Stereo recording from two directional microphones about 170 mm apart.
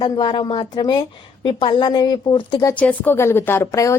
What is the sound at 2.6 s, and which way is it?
A woman's voice, 10° left (ahead or behind).